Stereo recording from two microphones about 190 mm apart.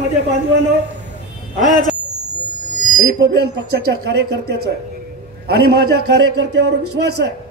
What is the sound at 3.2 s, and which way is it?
A man's voice, 60° right (ahead or behind).